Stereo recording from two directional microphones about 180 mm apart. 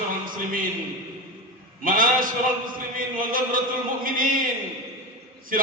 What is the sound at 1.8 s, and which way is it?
A man's voice, 50° right (ahead or behind).